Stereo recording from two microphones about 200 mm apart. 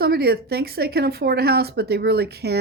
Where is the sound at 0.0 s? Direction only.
50° right (ahead or behind).